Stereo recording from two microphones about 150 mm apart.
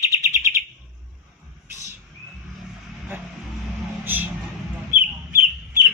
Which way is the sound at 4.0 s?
10° right (ahead or behind).